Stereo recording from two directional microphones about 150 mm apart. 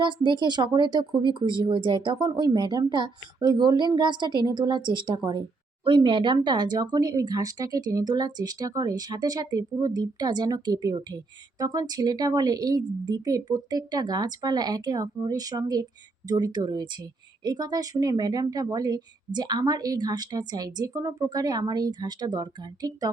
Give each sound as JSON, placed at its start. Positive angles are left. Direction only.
{"t": 0.0, "sound": "speech", "side_deg": -30}